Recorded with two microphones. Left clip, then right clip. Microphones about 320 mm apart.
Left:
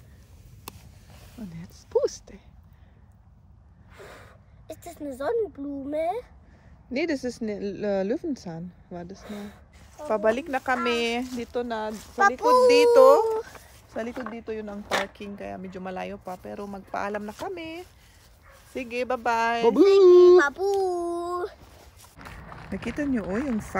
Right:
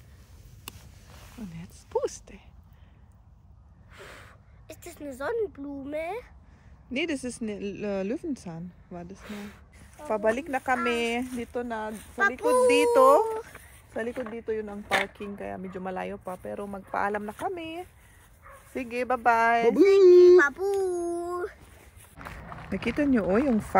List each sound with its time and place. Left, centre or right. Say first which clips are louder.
1.4 s speech: left 2 dB; centre
3.9 s a sound: left 1 dB; centre
5.9 s speech: left 6 dB; centre
12.2 s a child's voice: left 4 dB; centre
12.6 s speech: left 4 dB; centre
13.3 s speech: left 5 dB; centre
15.1 s speech: even; centre
19.7 s child singing: left 2 dB; centre
22.2 s speech: right 1 dB; centre